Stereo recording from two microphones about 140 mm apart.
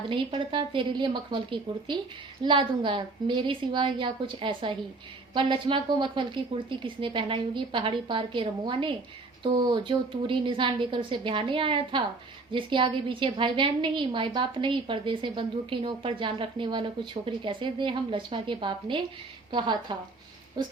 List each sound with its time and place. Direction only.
0.1 s a woman's voice: 35° right (ahead or behind)